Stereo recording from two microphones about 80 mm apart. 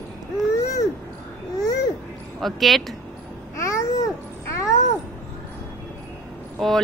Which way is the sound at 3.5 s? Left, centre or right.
Left.